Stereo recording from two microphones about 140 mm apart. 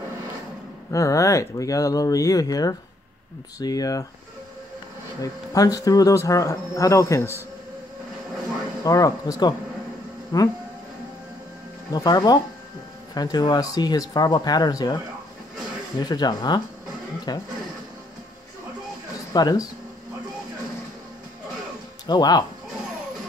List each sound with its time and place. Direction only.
0.9 s speech: 25° left (ahead or behind)
5.2 s speech: 25° left (ahead or behind)
8.8 s speech: 25° left (ahead or behind)
11.9 s speech: 30° left (ahead or behind)
16.0 s speech: 30° left (ahead or behind)
19.3 s speech: 25° left (ahead or behind)
22.0 s speech: 30° left (ahead or behind)